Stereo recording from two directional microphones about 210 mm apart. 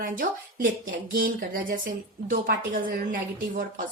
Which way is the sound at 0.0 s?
40° right (ahead or behind).